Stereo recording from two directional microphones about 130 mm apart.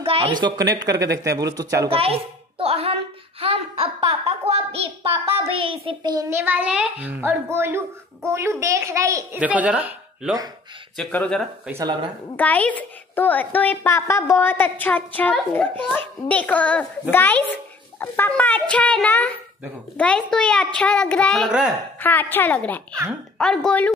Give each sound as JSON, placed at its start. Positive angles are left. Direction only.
{"t": 0.0, "sound": "a child's voice", "side_deg": -45}
{"t": 1.9, "sound": "a woman's voice", "side_deg": -45}
{"t": 2.6, "sound": "a sound", "side_deg": -50}
{"t": 5.5, "sound": "a child's voice", "side_deg": -45}
{"t": 6.1, "sound": "a child's voice", "side_deg": -15}
{"t": 9.4, "sound": "speech", "side_deg": -10}
{"t": 11.0, "sound": "a woman's voice", "side_deg": 10}
{"t": 11.8, "sound": "speech", "side_deg": -35}
{"t": 12.4, "sound": "a woman's voice", "side_deg": 10}
{"t": 21.5, "sound": "a woman's voice", "side_deg": -5}
{"t": 22.0, "sound": "a woman's voice", "side_deg": 15}